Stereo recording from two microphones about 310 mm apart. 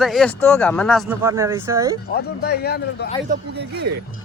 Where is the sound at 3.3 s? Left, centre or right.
Right.